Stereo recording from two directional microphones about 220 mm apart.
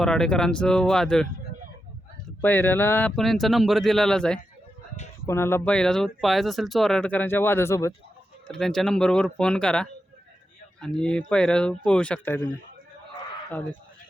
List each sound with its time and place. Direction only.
0.0 s speech: 5° left (ahead or behind)
2.4 s speech: 10° left (ahead or behind)